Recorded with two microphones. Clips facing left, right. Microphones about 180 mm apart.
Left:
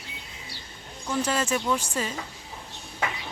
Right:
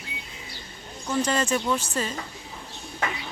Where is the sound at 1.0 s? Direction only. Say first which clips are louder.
Right 2 dB; 5° left (ahead or behind).